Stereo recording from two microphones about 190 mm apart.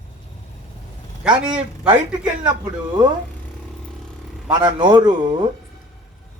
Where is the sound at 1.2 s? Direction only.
5° right (ahead or behind).